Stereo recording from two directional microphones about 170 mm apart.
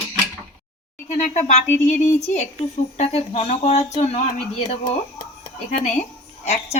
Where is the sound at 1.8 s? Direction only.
45° left (ahead or behind).